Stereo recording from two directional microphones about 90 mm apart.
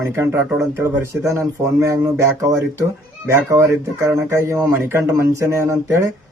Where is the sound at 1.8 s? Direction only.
30° right (ahead or behind).